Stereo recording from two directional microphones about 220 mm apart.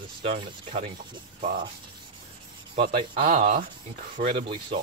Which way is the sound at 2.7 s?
25° right (ahead or behind).